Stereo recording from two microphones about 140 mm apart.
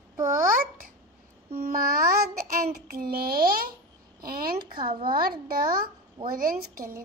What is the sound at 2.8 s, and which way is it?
A woman's voice, 90° right.